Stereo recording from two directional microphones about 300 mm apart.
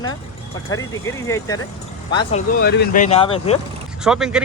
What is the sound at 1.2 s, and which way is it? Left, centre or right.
Speech, centre.